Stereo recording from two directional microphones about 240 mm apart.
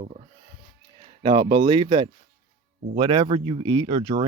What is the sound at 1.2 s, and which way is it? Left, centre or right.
Speech, right.